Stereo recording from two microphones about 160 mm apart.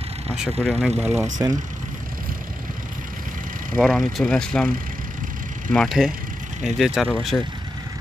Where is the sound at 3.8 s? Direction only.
Centre (ahead or behind).